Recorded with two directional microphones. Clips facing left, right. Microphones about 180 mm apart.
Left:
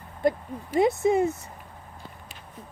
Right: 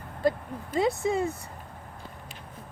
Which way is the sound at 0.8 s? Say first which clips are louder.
Left 5 dB; 20° left (ahead or behind).